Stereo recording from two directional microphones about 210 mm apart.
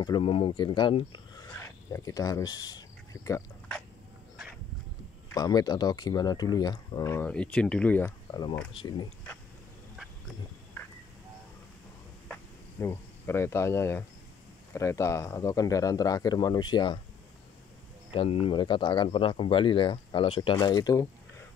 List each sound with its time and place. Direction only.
0.0 s speech: 25° left (ahead or behind)
5.3 s speech: 15° left (ahead or behind)
8.3 s speech: 20° left (ahead or behind)
12.3 s insect: 10° left (ahead or behind)
14.7 s speech: 15° left (ahead or behind)
18.1 s speech: 25° left (ahead or behind)